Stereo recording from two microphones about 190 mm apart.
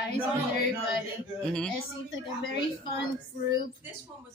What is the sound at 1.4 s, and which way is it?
Speech, 5° left (ahead or behind).